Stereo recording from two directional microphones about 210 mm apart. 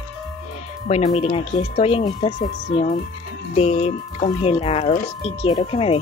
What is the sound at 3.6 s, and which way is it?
Speech, 30° left (ahead or behind).